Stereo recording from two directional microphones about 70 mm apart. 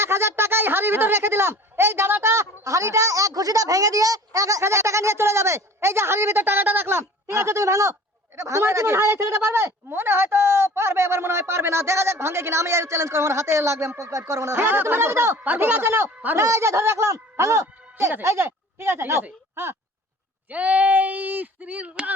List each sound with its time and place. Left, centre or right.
0.0 s speech: right
20.5 s speech: right